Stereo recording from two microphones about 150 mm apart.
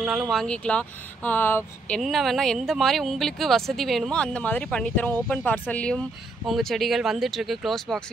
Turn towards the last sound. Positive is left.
turn(degrees=0)  # may be behind; listen again after turning